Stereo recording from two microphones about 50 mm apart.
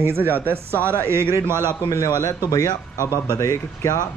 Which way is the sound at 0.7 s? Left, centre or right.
Left.